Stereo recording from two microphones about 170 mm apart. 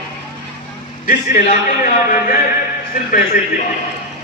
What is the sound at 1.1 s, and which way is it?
A man's voice, 55° left (ahead or behind).